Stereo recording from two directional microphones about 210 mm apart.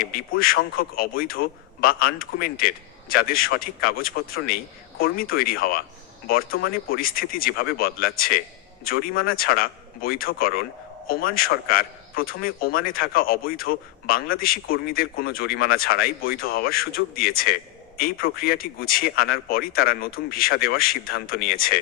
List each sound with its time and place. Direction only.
0.0 s a man's voice: 45° left (ahead or behind)